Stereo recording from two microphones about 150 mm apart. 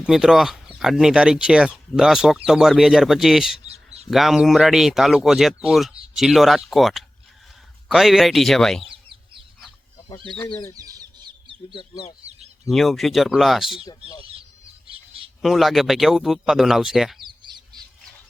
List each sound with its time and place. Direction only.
0.0 s speech: 5° right (ahead or behind)
10.8 s chicken: 25° right (ahead or behind)
12.6 s speech: centre (ahead or behind)
15.4 s speech: centre (ahead or behind)
17.2 s bird: 30° right (ahead or behind)